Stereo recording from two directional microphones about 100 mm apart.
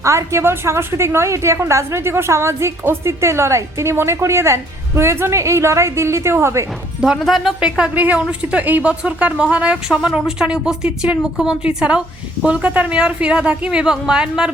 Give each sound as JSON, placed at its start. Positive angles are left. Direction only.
{"t": 0.0, "sound": "a woman's voice", "side_deg": -30}
{"t": 7.0, "sound": "speech", "side_deg": -5}